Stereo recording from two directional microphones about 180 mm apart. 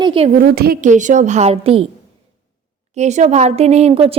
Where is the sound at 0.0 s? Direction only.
30° right (ahead or behind).